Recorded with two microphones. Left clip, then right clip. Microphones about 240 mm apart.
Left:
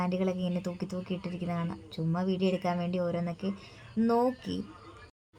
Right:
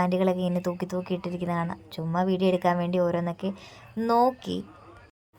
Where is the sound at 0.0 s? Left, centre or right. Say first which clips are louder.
Right 7 dB; right.